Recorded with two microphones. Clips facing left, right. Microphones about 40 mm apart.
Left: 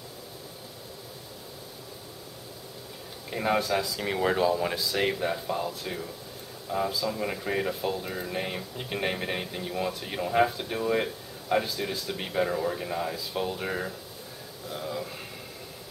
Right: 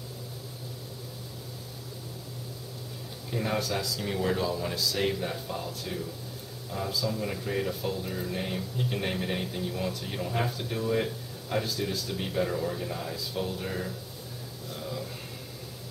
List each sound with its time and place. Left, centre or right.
3.3 s speech: left